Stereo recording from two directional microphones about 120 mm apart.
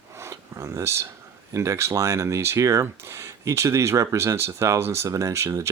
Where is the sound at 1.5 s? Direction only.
25° right (ahead or behind).